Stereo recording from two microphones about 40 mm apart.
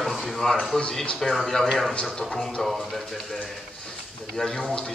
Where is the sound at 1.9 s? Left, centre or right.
Left.